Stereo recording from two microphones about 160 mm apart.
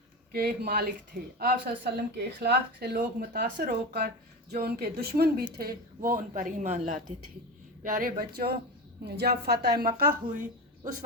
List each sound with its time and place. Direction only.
0.3 s a woman's voice: 75° right (ahead or behind); by 7.0 s 50° right (ahead or behind)
7.9 s a woman's voice: 60° right (ahead or behind); by 8.5 s 75° right (ahead or behind)
9.0 s a woman's voice: 90° right; by 10.2 s 75° right (ahead or behind)